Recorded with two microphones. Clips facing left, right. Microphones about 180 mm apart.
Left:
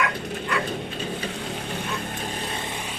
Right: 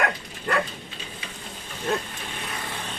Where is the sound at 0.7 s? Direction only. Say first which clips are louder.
Left 11 dB; 65° left (ahead or behind).